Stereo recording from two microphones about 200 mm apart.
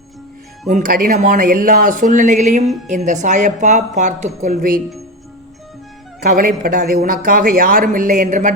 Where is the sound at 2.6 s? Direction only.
Centre (ahead or behind).